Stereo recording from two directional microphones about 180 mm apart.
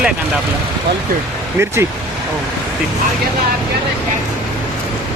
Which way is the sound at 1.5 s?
15° right (ahead or behind).